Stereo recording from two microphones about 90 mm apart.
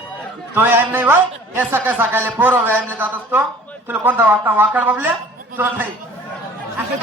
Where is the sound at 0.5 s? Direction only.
20° right (ahead or behind).